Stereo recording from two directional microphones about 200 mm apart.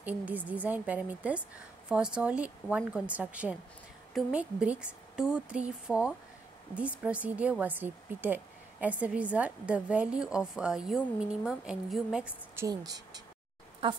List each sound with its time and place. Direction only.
0.0 s speech: 10° right (ahead or behind)
12.6 s speech: 20° right (ahead or behind)